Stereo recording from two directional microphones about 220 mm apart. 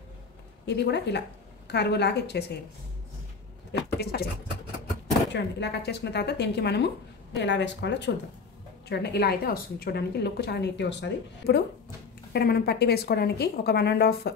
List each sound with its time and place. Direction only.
0.7 s a woman's voice: 50° left (ahead or behind)
4.0 s a woman's voice: 45° left (ahead or behind)
5.3 s a woman's voice: 50° left (ahead or behind)